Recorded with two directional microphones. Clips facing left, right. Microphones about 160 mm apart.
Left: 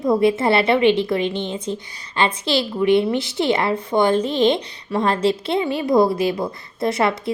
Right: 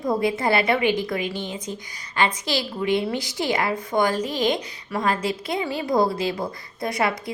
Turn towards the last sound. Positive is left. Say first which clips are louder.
# left 5 dB
turn(degrees=25)  # may be behind; listen again after turning